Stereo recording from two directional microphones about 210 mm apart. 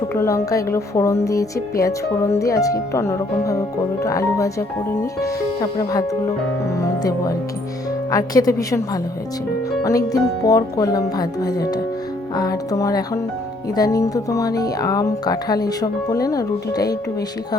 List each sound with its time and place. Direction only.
0.1 s speech: 15° left (ahead or behind)